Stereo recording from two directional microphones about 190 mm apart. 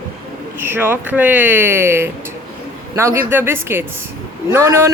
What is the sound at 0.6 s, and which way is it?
Speech, 10° right (ahead or behind).